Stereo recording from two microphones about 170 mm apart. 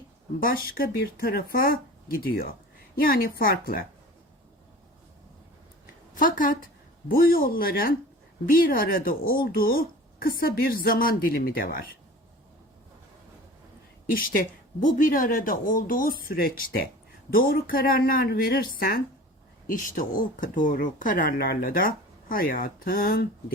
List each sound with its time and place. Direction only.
0.3 s speech: 60° left (ahead or behind)
6.1 s a woman's voice: 55° left (ahead or behind)
14.1 s speech: 55° left (ahead or behind)